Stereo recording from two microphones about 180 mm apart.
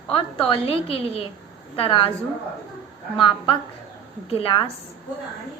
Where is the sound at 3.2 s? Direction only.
30° left (ahead or behind).